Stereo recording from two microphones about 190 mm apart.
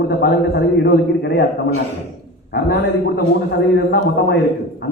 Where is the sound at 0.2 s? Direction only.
60° left (ahead or behind).